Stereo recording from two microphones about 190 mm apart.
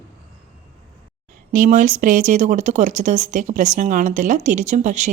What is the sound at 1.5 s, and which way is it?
Speech, 45° right (ahead or behind).